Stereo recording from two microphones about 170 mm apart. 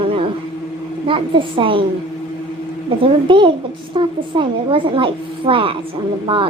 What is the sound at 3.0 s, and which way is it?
A woman's voice, 30° right (ahead or behind).